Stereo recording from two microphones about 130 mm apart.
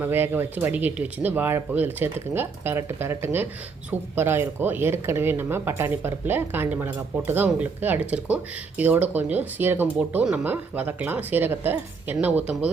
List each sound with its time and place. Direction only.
0.0 s speech: 15° right (ahead or behind)